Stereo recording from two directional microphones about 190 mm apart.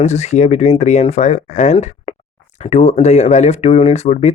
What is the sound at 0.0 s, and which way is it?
Speech, 35° left (ahead or behind).